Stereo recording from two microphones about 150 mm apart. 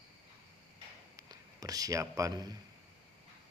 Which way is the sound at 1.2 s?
25° right (ahead or behind).